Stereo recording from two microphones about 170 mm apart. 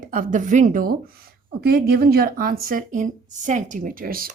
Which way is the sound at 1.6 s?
65° right (ahead or behind).